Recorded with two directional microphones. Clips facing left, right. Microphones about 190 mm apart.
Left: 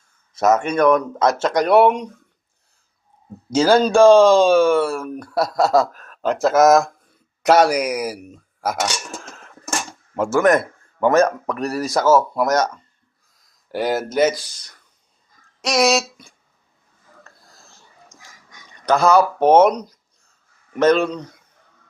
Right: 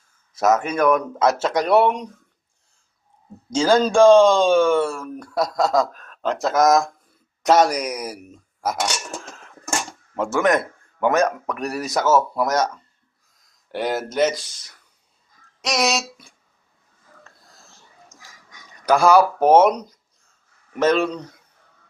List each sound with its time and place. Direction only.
0.3 s speech: centre (ahead or behind)
3.5 s speech: 5° left (ahead or behind)
10.2 s speech: centre (ahead or behind)
11.0 s speech: 15° right (ahead or behind)
12.4 s speech: centre (ahead or behind)
18.9 s speech: 10° right (ahead or behind)